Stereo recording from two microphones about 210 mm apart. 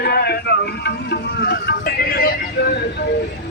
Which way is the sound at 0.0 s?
50° left (ahead or behind).